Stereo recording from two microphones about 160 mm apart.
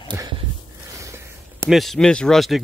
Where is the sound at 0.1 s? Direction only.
10° right (ahead or behind).